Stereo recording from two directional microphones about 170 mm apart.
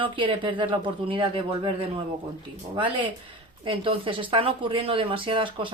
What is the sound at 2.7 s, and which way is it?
A woman's voice, 30° right (ahead or behind).